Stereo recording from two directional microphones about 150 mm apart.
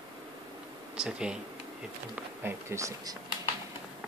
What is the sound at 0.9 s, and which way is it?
Speech, 5° right (ahead or behind).